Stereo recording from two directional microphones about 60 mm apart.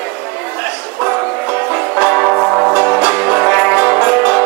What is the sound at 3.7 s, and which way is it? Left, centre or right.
Music, right.